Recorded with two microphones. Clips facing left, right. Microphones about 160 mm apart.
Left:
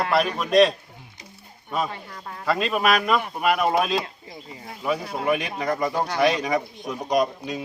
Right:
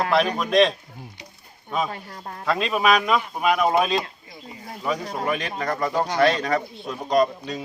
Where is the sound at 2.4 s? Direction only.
Centre (ahead or behind).